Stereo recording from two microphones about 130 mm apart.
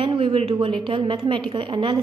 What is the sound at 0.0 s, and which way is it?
A woman's voice, 40° right (ahead or behind).